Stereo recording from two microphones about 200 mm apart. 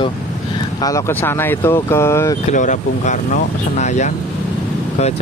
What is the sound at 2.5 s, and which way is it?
Speech, 40° left (ahead or behind).